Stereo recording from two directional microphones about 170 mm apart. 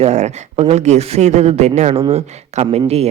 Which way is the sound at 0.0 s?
40° right (ahead or behind).